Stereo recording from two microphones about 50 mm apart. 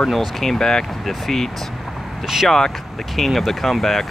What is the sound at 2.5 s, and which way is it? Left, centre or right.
Speech, centre.